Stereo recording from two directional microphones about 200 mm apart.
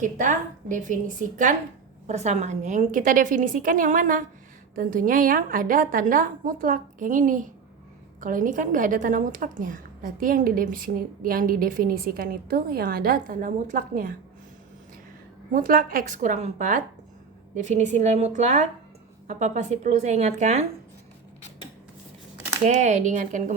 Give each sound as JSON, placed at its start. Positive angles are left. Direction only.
{"t": 0.0, "sound": "a woman's voice", "side_deg": -40}
{"t": 15.5, "sound": "a woman's voice", "side_deg": -45}
{"t": 22.6, "sound": "a woman's voice", "side_deg": -35}